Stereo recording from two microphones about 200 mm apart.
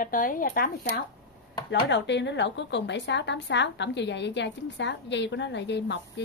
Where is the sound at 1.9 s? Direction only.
65° left (ahead or behind).